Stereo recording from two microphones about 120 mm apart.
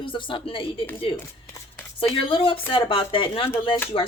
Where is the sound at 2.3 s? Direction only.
45° left (ahead or behind).